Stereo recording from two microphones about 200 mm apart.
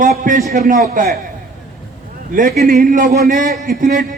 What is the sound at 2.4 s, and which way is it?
A man's voice, 40° right (ahead or behind).